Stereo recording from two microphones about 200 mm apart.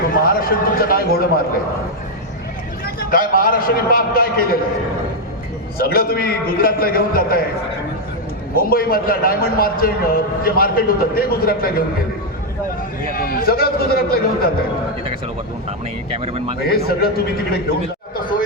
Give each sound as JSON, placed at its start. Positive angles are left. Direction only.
{"t": 0.1, "sound": "a man's voice", "side_deg": 45}
{"t": 2.8, "sound": "a man's voice", "side_deg": 45}
{"t": 5.7, "sound": "a man's voice", "side_deg": 50}
{"t": 8.5, "sound": "a man's voice", "side_deg": 50}
{"t": 13.1, "sound": "a man's voice", "side_deg": 45}
{"t": 16.1, "sound": "speech", "side_deg": -30}
{"t": 16.6, "sound": "a man's voice", "side_deg": 50}